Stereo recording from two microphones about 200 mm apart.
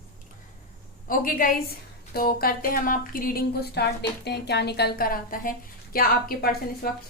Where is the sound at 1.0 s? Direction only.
45° left (ahead or behind).